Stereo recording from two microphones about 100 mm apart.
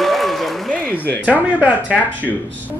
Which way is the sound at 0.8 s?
20° left (ahead or behind).